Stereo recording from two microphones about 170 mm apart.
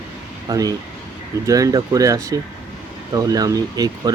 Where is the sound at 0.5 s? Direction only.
20° right (ahead or behind).